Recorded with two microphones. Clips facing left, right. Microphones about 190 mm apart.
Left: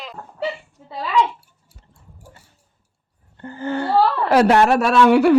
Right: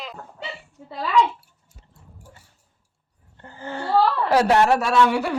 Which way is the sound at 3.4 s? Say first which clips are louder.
Left 8 dB; 70° left (ahead or behind).